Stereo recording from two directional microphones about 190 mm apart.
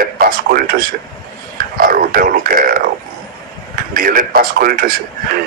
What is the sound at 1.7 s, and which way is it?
Speech, 50° right (ahead or behind).